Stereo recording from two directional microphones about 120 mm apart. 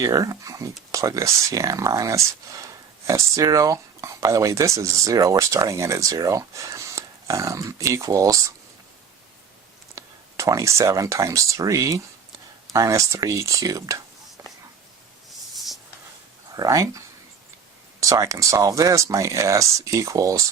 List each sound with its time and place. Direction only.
0.0 s speech: 30° right (ahead or behind)
9.9 s speech: 25° right (ahead or behind)
15.5 s writing: centre (ahead or behind)
16.6 s speech: 30° right (ahead or behind)
18.0 s speech: 25° right (ahead or behind)